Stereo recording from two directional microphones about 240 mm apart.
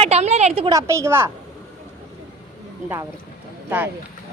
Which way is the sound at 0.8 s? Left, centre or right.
Centre.